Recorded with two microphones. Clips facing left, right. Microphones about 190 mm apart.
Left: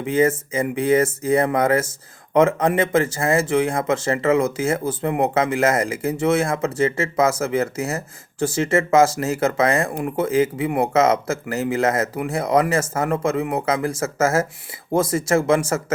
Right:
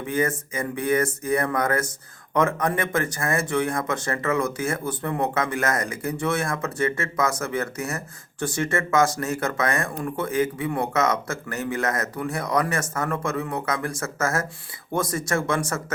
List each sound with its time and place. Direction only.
0.0 s speech: 25° left (ahead or behind)